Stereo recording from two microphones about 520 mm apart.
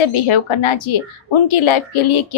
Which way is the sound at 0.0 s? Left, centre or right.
Left.